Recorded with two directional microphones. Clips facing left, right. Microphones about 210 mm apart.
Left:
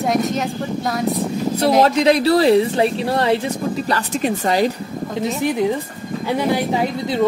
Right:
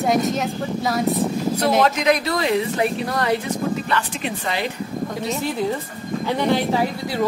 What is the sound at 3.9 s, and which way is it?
Speech, 40° left (ahead or behind).